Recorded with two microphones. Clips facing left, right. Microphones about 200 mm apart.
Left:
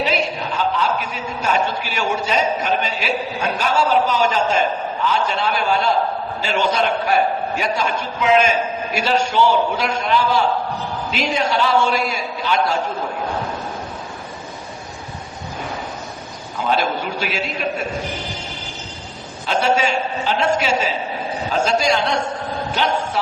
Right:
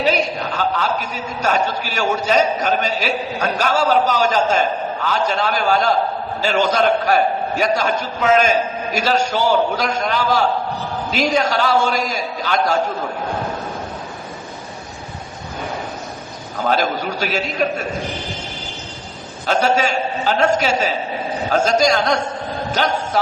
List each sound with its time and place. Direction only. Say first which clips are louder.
0.0 s a sound: right 2 dB; 40° right (ahead or behind)
0.5 s a man's voice: even; 40° right (ahead or behind)
16.6 s a man's voice: right 1 dB; 40° right (ahead or behind)
19.5 s a man's voice: right 1 dB; 40° right (ahead or behind)